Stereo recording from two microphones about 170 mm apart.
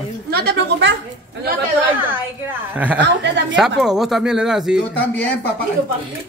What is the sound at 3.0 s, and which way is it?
Speech, 90° right.